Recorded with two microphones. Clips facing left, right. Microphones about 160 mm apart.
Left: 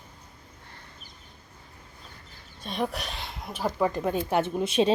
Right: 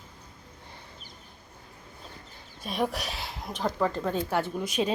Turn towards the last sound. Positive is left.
turn(degrees=25)  # may be behind; listen again after turning